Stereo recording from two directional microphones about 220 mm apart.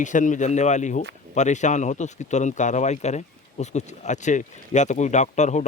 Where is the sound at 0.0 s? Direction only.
35° left (ahead or behind).